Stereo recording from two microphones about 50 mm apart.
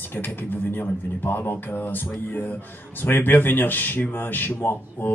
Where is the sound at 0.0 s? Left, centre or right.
Left.